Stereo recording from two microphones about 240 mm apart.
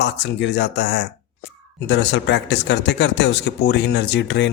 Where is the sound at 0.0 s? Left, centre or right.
Left.